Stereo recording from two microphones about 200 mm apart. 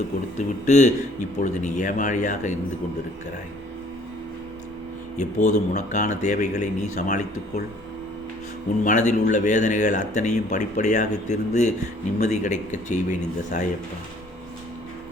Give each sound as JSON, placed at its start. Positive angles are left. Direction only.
{"t": 0.3, "sound": "speech", "side_deg": 35}
{"t": 5.1, "sound": "speech", "side_deg": 35}
{"t": 8.8, "sound": "speech", "side_deg": 40}